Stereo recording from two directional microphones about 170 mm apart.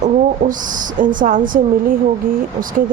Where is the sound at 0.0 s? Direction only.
50° right (ahead or behind).